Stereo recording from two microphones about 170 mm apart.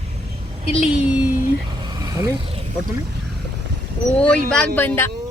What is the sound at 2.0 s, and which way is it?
Vehicle, 20° right (ahead or behind).